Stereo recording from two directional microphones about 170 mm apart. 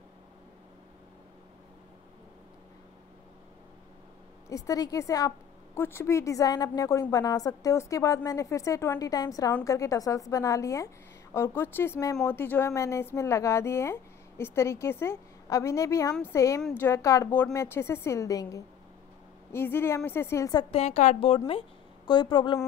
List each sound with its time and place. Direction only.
4.5 s a woman's voice: 20° left (ahead or behind)
20.7 s a woman's voice: 40° left (ahead or behind)